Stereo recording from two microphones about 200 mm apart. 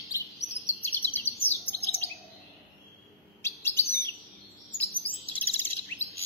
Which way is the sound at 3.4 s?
10° left (ahead or behind).